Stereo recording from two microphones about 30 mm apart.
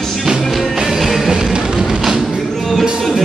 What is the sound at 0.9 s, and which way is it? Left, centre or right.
Music, centre.